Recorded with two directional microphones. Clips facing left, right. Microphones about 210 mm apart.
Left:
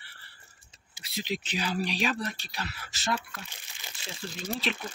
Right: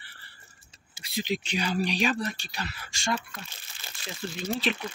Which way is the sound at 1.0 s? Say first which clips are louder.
Right 4 dB; centre (ahead or behind).